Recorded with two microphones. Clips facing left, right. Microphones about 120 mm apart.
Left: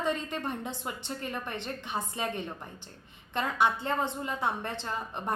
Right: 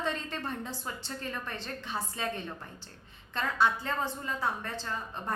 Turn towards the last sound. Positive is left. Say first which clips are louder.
# left 2 dB
turn(degrees=20)  # may be behind; listen again after turning